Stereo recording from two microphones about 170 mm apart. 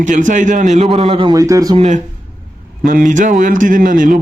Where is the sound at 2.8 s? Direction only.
50° right (ahead or behind).